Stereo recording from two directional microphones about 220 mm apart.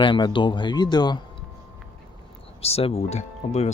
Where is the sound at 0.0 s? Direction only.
20° left (ahead or behind).